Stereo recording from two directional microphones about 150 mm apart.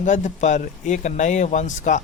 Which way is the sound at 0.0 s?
55° left (ahead or behind).